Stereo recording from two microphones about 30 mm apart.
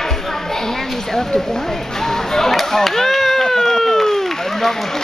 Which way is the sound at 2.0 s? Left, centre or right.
Centre.